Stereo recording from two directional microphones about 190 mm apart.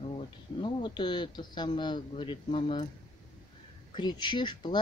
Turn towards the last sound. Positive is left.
turn(degrees=25)  # may be behind; listen again after turning